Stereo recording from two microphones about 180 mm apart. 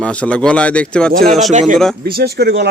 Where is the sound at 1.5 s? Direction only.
40° right (ahead or behind).